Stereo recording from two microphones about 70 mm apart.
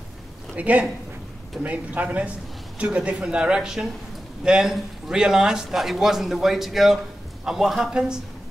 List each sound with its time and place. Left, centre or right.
0.6 s a man's voice: right